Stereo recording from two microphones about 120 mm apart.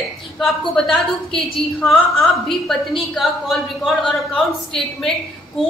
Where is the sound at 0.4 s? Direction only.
5° left (ahead or behind).